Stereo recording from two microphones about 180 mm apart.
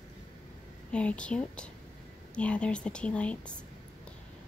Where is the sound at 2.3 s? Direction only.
5° left (ahead or behind).